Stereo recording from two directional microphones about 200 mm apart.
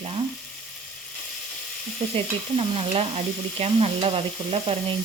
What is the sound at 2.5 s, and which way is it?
Frying, 30° right (ahead or behind).